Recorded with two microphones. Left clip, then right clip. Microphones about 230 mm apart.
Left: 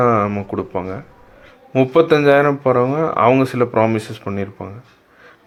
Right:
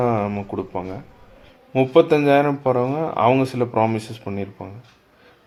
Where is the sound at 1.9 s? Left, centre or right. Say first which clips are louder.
Left 3 dB; left.